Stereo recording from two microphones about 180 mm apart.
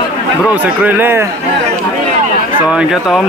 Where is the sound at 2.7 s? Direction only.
5° right (ahead or behind).